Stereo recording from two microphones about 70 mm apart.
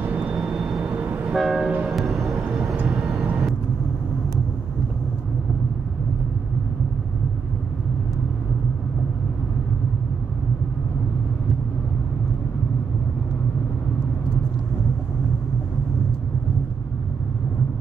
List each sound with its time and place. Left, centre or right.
0.0 s vehicle: centre
0.4 s vehicle: centre
0.9 s vehicle: right
1.3 s train: centre
1.9 s music: centre